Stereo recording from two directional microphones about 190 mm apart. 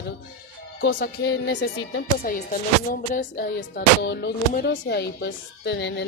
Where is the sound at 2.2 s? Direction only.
50° left (ahead or behind).